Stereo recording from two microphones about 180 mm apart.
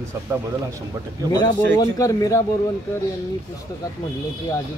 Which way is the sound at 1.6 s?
20° left (ahead or behind).